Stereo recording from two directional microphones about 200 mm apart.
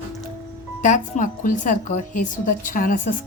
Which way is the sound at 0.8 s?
40° left (ahead or behind).